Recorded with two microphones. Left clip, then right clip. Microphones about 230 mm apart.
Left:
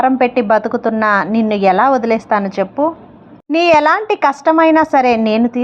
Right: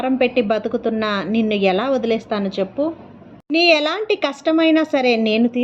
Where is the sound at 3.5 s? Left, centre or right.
Centre.